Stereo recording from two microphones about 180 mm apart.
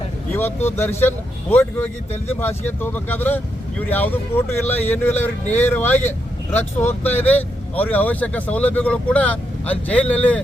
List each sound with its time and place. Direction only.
0.3 s speech: 10° left (ahead or behind)